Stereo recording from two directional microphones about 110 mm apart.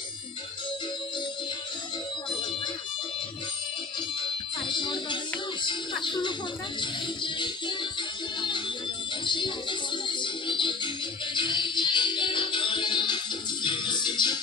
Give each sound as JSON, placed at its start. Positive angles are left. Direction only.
{"t": 4.2, "sound": "music", "side_deg": 45}